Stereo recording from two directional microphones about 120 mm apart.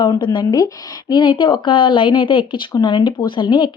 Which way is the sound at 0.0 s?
35° left (ahead or behind).